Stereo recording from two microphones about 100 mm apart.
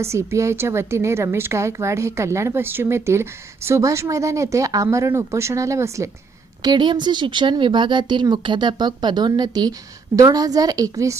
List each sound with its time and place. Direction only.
0.0 s a woman's voice: 30° right (ahead or behind)
6.6 s a woman's voice: 50° right (ahead or behind)